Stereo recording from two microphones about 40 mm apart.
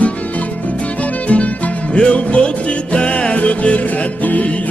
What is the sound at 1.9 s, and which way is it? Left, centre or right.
Music, left.